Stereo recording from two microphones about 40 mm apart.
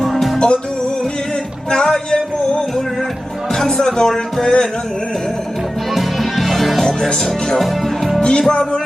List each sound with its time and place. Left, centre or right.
0.3 s music: left
1.7 s music: centre
3.5 s speech: centre
5.9 s music: centre
7.5 s speech: centre
8.2 s music: left